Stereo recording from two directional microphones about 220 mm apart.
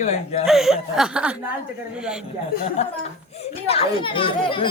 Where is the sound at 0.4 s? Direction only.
Centre (ahead or behind).